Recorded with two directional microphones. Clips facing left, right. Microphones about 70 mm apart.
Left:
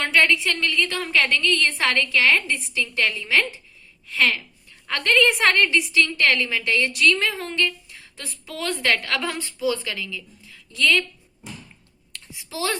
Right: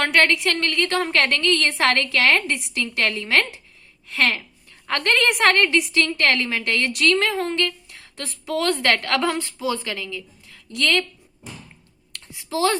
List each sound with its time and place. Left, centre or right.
0.0 s a woman's voice: right
12.5 s a child's voice: right